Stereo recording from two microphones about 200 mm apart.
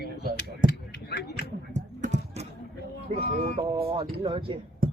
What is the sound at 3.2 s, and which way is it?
Speech, 50° right (ahead or behind).